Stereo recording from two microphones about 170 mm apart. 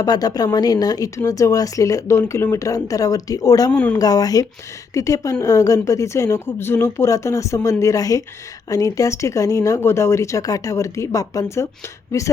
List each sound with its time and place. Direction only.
0.0 s speech: 20° left (ahead or behind)
3.7 s speech: 5° left (ahead or behind)
3.9 s speech: 20° left (ahead or behind)